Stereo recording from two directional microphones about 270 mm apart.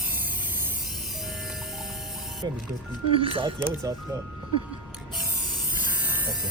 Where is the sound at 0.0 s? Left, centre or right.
Centre.